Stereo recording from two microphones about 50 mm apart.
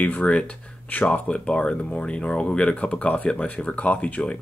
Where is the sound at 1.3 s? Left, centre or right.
Left.